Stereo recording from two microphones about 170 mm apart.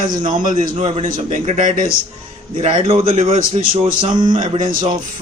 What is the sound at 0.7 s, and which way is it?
A man's voice, 35° right (ahead or behind).